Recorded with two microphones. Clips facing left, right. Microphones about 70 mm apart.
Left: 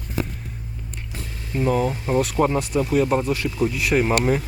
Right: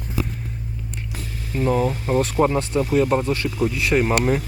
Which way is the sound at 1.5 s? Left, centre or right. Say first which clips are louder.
Right 1 dB; centre.